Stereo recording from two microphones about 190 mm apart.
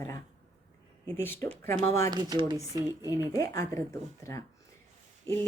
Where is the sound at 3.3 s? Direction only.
15° left (ahead or behind).